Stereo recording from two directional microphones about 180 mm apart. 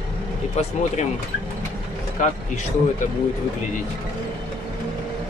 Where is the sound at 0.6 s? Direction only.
40° left (ahead or behind).